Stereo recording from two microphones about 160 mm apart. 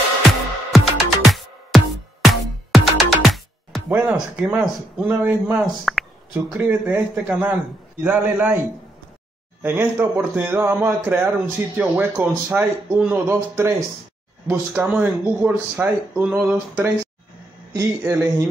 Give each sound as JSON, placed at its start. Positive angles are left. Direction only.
{"t": 0.2, "sound": "music", "side_deg": 0}
{"t": 4.1, "sound": "speech", "side_deg": -10}
{"t": 9.6, "sound": "speech", "side_deg": -15}
{"t": 17.7, "sound": "speech", "side_deg": -20}